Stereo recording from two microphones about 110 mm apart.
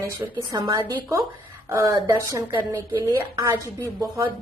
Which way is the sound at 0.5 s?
30° right (ahead or behind).